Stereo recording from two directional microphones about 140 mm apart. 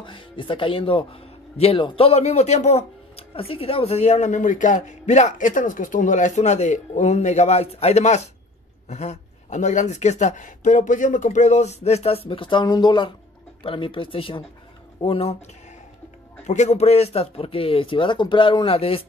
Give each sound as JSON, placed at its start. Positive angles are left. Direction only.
{"t": 0.0, "sound": "speech", "side_deg": 35}
{"t": 16.4, "sound": "speech", "side_deg": 55}